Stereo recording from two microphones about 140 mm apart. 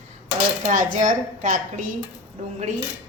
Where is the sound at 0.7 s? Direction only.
70° right (ahead or behind).